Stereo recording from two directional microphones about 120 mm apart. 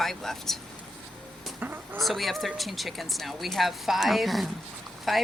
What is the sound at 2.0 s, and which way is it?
Speech, centre (ahead or behind).